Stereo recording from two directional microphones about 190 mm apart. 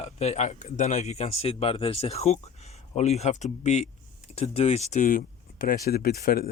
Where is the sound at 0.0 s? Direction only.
35° left (ahead or behind).